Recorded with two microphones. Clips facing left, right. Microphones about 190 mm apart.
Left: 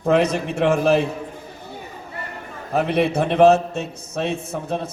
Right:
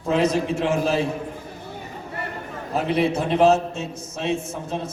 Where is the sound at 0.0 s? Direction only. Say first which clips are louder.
Left 2 dB; 65° left (ahead or behind).